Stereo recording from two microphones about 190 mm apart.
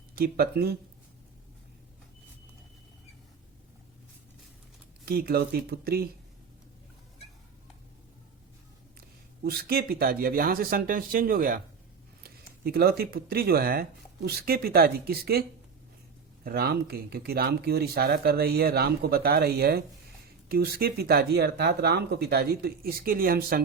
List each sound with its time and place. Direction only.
0.2 s speech: 55° right (ahead or behind)
5.0 s speech: 55° right (ahead or behind)
9.0 s speech: 55° right (ahead or behind)